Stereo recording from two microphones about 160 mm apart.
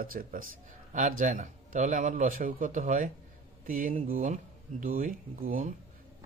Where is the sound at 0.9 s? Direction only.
50° right (ahead or behind).